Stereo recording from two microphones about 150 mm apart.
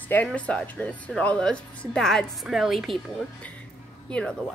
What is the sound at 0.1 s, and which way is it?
Speech, 5° left (ahead or behind).